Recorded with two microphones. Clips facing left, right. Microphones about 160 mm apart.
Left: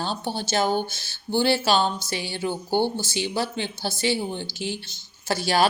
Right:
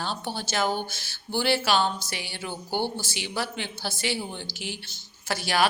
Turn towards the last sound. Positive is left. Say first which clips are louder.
# left 3 dB
turn(degrees=30)  # may be behind; listen again after turning